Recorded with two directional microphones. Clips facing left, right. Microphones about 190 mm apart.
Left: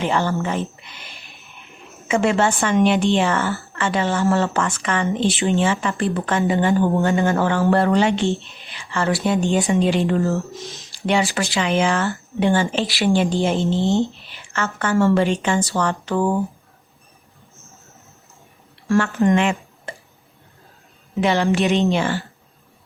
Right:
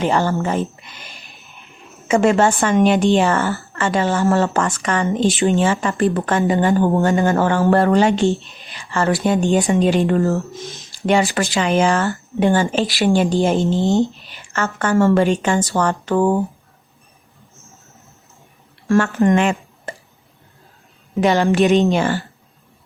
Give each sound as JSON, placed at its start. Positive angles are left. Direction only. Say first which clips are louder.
{"t": 0.0, "sound": "speech", "louder": "right 3 dB", "side_deg": -40}
{"t": 8.3, "sound": "speech", "louder": "right 3 dB", "side_deg": 0}
{"t": 9.0, "sound": "a woman's voice", "louder": "right 3 dB", "side_deg": -50}
{"t": 14.8, "sound": "speech", "louder": "right 2 dB", "side_deg": -50}
{"t": 18.9, "sound": "speech", "louder": "right 2 dB", "side_deg": -50}
{"t": 21.2, "sound": "speech", "louder": "right 3 dB", "side_deg": -45}